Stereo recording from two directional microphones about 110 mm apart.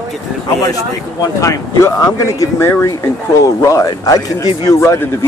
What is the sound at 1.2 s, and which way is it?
Speech, 30° left (ahead or behind).